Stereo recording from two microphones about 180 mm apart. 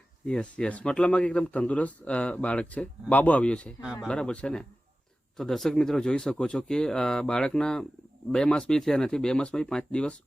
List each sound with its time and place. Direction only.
0.3 s a man's voice: 5° left (ahead or behind)